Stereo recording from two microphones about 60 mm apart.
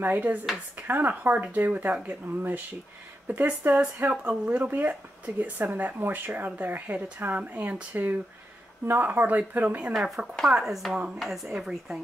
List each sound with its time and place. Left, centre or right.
0.0 s speech: right
9.9 s speech: centre